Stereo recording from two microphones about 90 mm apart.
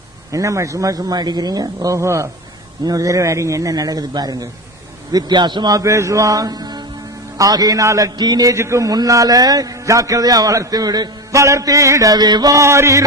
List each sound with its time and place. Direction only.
0.3 s a man's voice: 35° right (ahead or behind)
8.5 s a man's voice: 30° right (ahead or behind)